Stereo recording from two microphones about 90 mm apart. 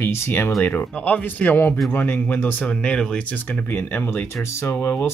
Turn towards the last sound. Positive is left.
turn(degrees=15)  # may be behind; listen again after turning